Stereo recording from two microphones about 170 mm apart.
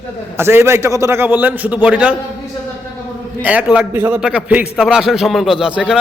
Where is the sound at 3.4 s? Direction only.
10° right (ahead or behind).